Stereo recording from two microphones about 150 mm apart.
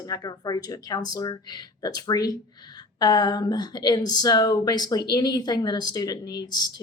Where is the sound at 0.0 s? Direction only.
25° left (ahead or behind).